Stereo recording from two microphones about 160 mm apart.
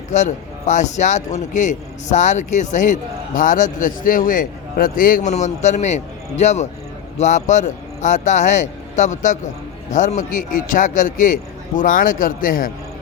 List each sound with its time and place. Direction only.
0.1 s speech: 50° left (ahead or behind)